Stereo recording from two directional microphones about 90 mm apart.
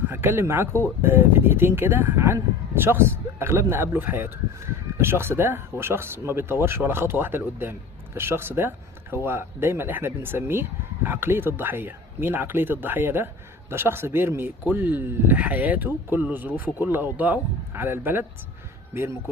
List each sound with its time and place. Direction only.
0.1 s speech: 25° right (ahead or behind)